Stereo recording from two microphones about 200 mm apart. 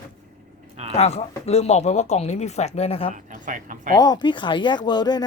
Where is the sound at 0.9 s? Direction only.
30° left (ahead or behind).